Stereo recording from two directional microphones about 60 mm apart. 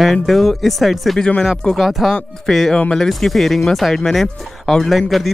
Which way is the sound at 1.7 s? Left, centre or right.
Centre.